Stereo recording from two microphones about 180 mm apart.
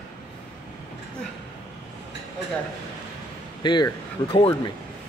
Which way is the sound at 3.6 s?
25° left (ahead or behind).